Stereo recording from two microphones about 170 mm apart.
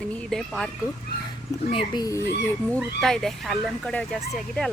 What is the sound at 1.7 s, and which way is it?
Speech, 30° left (ahead or behind).